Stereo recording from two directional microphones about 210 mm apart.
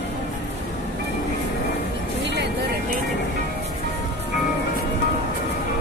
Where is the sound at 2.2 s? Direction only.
55° right (ahead or behind).